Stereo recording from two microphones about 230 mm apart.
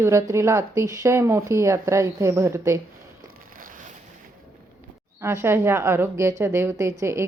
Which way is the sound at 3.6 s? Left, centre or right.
Right.